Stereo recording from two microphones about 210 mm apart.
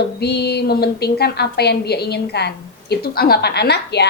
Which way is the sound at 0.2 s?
50° left (ahead or behind).